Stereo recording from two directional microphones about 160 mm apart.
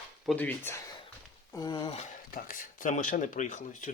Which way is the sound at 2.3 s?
60° left (ahead or behind).